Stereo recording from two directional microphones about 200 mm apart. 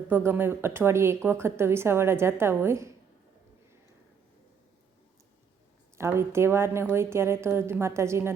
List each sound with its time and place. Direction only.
0.3 s speech: 10° right (ahead or behind)
6.0 s speech: 15° right (ahead or behind)